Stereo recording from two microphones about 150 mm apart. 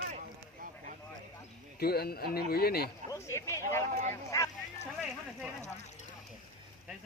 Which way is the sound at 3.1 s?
20° left (ahead or behind).